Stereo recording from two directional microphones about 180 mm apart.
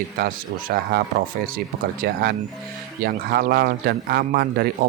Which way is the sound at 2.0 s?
60° right (ahead or behind).